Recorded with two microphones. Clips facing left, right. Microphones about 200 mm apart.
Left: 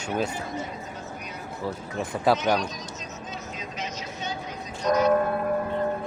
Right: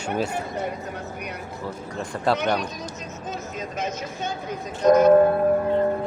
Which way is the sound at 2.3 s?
60° right (ahead or behind).